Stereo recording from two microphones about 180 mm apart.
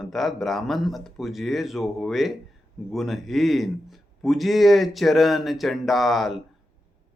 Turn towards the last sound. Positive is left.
turn(degrees=0)  # may be behind; listen again after turning